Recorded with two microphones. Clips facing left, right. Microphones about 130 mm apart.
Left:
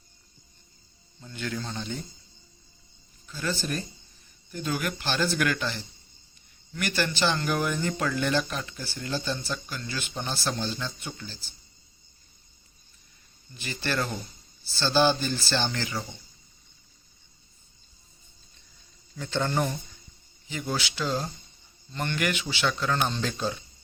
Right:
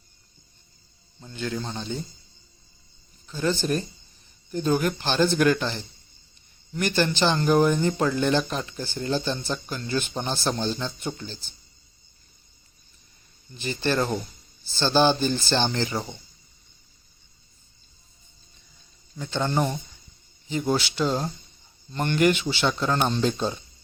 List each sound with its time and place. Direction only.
1.2 s speech: 25° right (ahead or behind)
3.2 s speech: 20° right (ahead or behind)
9.6 s speech: 35° right (ahead or behind)
13.6 s speech: 25° right (ahead or behind)
19.1 s speech: 15° right (ahead or behind)